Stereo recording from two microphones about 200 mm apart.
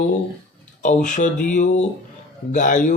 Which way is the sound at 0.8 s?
40° left (ahead or behind).